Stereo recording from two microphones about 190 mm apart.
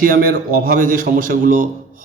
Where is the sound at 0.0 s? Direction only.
50° right (ahead or behind).